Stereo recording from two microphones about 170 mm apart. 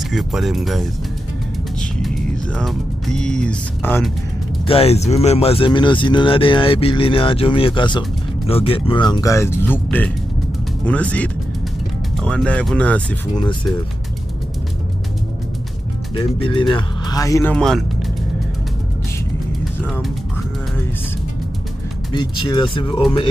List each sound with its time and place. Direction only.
0.1 s speech: centre (ahead or behind)
4.6 s speech: 35° left (ahead or behind); by 13.2 s 10° left (ahead or behind)
16.2 s speech: 30° left (ahead or behind)
17.6 s speech: centre (ahead or behind)
22.1 s speech: 25° left (ahead or behind)